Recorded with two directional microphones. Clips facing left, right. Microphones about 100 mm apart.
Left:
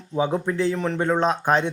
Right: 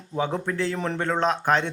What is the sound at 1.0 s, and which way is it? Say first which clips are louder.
Speech: left 2 dB; 15° left (ahead or behind).